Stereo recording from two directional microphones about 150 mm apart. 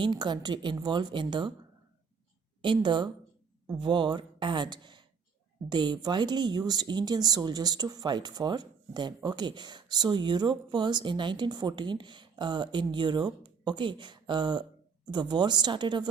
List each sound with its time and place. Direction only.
0.0 s a woman's voice: 30° right (ahead or behind)
2.6 s a woman's voice: 30° right (ahead or behind)